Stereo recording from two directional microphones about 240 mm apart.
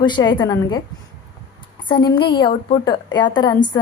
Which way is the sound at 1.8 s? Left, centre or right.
Centre.